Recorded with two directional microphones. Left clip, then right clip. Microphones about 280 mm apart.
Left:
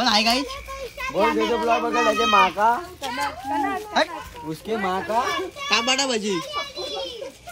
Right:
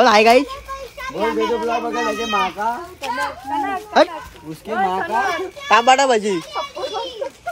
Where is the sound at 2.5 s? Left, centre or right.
Centre.